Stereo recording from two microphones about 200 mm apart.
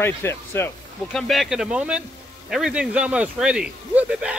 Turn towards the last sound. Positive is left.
turn(degrees=-5)  # may be behind; listen again after turning